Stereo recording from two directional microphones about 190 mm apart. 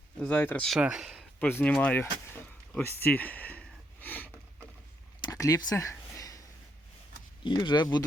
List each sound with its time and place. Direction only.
0.2 s speech: 5° left (ahead or behind)
1.4 s speech: 10° left (ahead or behind)
4.0 s a sound: 10° left (ahead or behind)
7.4 s speech: 25° left (ahead or behind)